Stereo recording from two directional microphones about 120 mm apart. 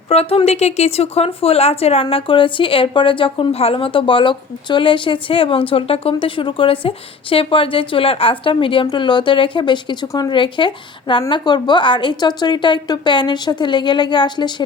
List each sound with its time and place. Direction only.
0.1 s a woman's voice: 55° left (ahead or behind); by 14.5 s 40° left (ahead or behind)